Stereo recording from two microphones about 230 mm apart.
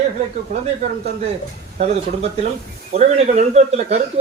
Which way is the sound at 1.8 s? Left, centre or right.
Right.